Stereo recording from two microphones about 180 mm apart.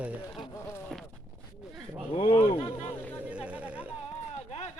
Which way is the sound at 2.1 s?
30° left (ahead or behind).